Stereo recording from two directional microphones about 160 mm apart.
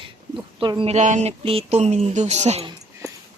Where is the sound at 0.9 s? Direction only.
45° right (ahead or behind).